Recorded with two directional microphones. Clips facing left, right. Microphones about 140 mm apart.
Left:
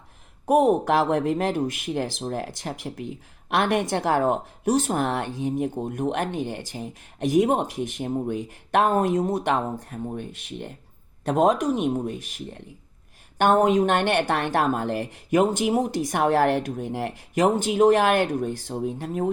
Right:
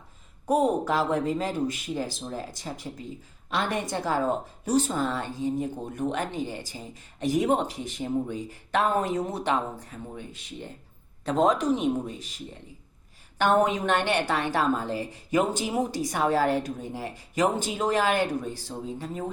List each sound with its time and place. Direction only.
0.4 s speech: 65° left (ahead or behind)
5.8 s a woman's voice: 55° left (ahead or behind)
11.3 s a woman's voice: 55° left (ahead or behind)
13.4 s a woman's voice: 50° left (ahead or behind)